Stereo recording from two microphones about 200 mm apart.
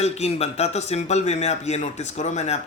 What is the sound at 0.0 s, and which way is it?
A man's voice, 30° left (ahead or behind).